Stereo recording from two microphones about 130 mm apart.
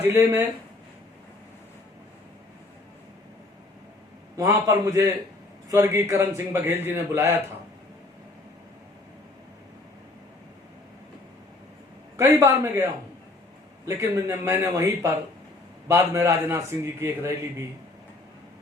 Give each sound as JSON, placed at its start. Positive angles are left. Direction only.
{"t": 0.0, "sound": "a man's voice", "side_deg": -20}
{"t": 4.4, "sound": "a man's voice", "side_deg": -20}
{"t": 12.1, "sound": "a man's voice", "side_deg": -20}